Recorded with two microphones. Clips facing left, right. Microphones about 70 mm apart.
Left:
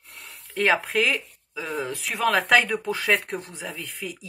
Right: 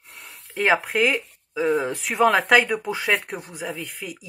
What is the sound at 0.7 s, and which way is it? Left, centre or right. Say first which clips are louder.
Speech: right 2 dB; centre.